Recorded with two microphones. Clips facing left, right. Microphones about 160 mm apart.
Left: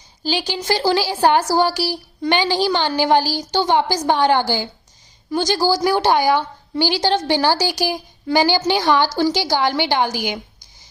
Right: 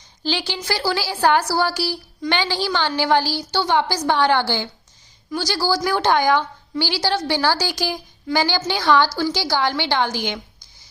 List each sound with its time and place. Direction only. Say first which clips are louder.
0.2 s a woman's voice: left 2 dB; 15° left (ahead or behind)